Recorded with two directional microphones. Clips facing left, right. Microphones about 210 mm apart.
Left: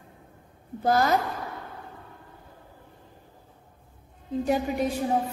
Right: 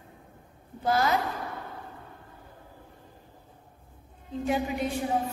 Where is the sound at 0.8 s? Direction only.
40° left (ahead or behind).